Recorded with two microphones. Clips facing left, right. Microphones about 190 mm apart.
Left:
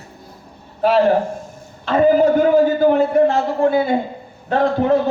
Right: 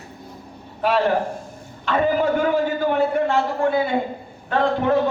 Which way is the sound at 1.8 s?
40° left (ahead or behind).